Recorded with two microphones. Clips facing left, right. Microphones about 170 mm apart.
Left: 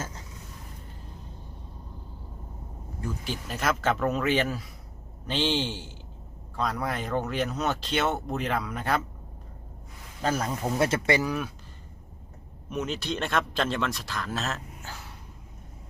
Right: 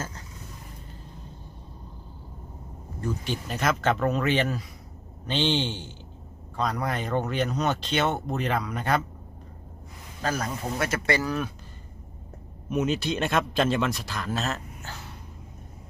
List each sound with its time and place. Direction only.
3.0 s speech: 5° left (ahead or behind)
10.2 s speech: 25° left (ahead or behind)
11.1 s speech: 15° left (ahead or behind)
12.7 s speech: 5° right (ahead or behind)